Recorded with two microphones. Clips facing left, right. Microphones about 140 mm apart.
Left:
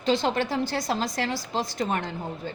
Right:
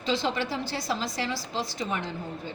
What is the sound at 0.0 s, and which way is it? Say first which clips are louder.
A woman's voice: left 4 dB; 55° left (ahead or behind).